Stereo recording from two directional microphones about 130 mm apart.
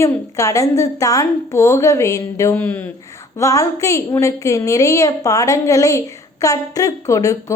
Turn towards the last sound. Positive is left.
turn(degrees=25)  # may be behind; listen again after turning